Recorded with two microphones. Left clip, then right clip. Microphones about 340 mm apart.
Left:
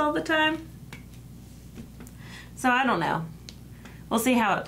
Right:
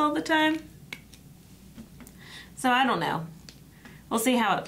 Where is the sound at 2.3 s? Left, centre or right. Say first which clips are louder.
Even; left.